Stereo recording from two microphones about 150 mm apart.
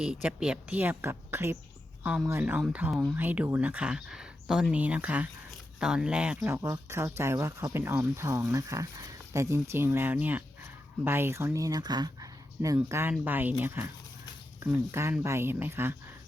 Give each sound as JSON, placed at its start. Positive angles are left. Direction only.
{"t": 0.0, "sound": "speech", "side_deg": -5}